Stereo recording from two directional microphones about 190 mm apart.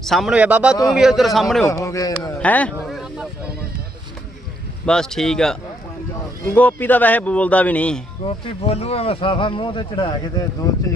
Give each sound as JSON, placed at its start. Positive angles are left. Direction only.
{"t": 0.0, "sound": "a man's voice", "side_deg": 0}
{"t": 1.7, "sound": "speech", "side_deg": 15}
{"t": 2.4, "sound": "speech", "side_deg": 5}
{"t": 2.8, "sound": "a sound", "side_deg": 0}
{"t": 4.9, "sound": "a man's voice", "side_deg": 5}
{"t": 8.2, "sound": "speech", "side_deg": 30}